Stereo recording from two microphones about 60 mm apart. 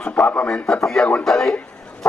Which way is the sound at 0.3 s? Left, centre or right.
Left.